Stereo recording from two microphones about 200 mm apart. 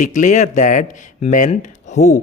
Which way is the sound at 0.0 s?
40° left (ahead or behind).